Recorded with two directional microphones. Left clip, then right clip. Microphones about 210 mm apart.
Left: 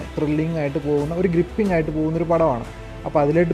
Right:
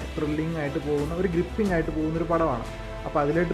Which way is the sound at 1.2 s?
35° left (ahead or behind).